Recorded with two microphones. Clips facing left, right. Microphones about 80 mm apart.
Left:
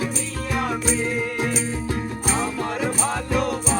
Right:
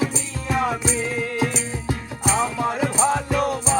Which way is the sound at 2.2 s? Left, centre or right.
Centre.